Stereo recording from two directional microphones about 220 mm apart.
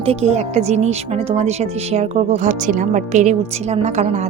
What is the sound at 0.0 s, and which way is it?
Speech, 30° right (ahead or behind).